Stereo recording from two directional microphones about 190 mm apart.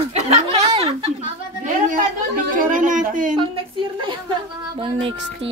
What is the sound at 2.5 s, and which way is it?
Speech, 45° right (ahead or behind).